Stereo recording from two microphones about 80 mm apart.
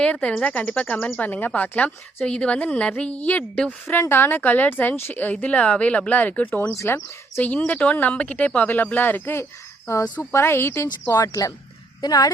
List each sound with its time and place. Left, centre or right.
0.0 s a woman's voice: centre
6.7 s speech: left
7.7 s a woman's voice: centre
10.8 s speech: left